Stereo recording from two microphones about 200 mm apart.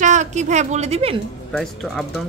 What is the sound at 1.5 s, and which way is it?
Speech, centre (ahead or behind).